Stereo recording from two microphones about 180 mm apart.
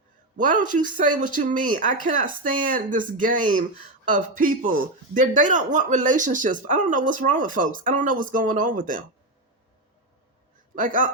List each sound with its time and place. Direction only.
0.3 s speech: 45° right (ahead or behind)
10.8 s speech: 45° right (ahead or behind)